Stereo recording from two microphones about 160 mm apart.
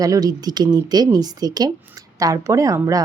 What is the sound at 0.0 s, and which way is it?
Speech, 20° right (ahead or behind).